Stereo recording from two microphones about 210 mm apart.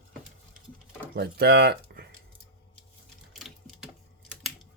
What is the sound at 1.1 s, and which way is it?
Speech, 50° right (ahead or behind).